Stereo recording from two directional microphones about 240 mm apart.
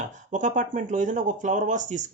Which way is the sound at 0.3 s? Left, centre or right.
Right.